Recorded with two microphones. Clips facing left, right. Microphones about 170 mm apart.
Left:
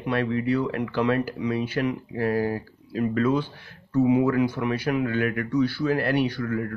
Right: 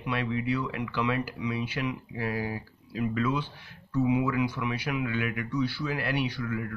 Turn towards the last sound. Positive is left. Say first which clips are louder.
# left 5 dB
turn(degrees=45)  # may be behind; listen again after turning